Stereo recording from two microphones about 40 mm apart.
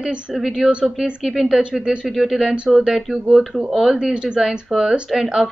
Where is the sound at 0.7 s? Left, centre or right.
Right.